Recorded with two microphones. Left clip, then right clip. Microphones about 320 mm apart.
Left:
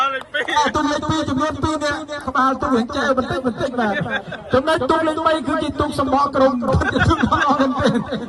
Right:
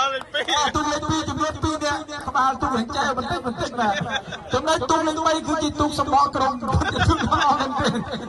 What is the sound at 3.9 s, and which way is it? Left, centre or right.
Speech, centre.